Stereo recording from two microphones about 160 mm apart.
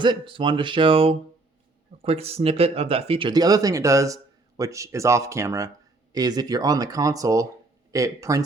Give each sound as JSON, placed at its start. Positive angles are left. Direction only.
{"t": 0.0, "sound": "speech", "side_deg": -30}